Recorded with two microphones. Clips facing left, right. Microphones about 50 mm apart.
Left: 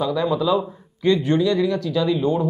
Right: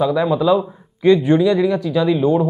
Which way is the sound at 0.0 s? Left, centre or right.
Centre.